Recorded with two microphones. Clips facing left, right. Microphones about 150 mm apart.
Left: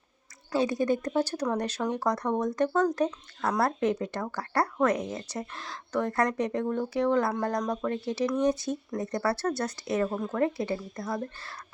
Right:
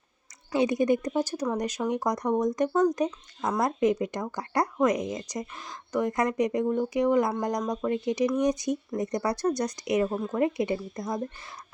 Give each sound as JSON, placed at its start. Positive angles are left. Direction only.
{"t": 0.5, "sound": "speech", "side_deg": -20}